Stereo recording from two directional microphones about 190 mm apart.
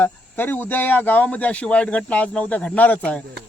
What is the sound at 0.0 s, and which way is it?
Speech, 10° left (ahead or behind).